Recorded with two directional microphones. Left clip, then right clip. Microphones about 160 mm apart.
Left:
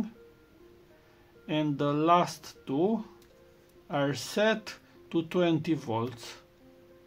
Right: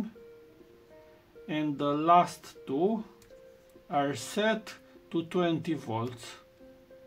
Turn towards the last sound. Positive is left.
turn(degrees=40)  # may be behind; listen again after turning